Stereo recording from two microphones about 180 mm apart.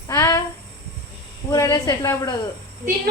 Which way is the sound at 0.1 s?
20° left (ahead or behind).